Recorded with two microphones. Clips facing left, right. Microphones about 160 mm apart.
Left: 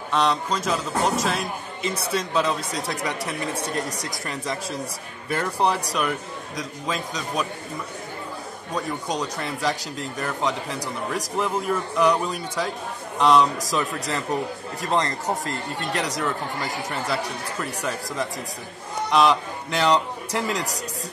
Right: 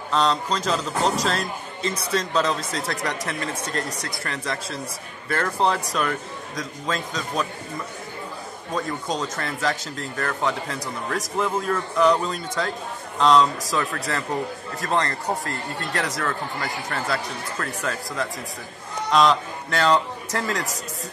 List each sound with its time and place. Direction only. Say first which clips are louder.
0.1 s speech: even; 5° left (ahead or behind)
8.7 s speech: even; 15° left (ahead or behind)